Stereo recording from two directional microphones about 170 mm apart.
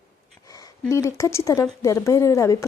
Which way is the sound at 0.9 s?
20° left (ahead or behind).